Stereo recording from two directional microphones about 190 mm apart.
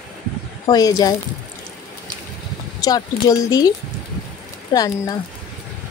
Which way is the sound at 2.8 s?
20° left (ahead or behind).